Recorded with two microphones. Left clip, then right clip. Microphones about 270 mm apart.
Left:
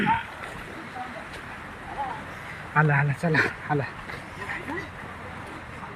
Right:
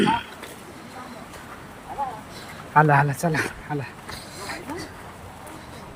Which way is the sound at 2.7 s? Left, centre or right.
Centre.